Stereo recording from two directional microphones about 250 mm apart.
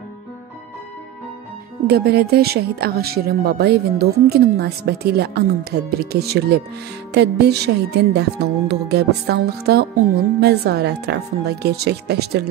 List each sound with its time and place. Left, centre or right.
1.9 s speech: right